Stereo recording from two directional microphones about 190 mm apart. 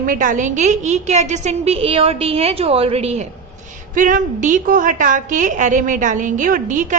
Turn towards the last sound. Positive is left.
turn(degrees=-40)  # may be behind; listen again after turning